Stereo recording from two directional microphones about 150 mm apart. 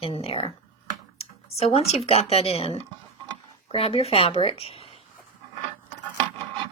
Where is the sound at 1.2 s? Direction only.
40° left (ahead or behind).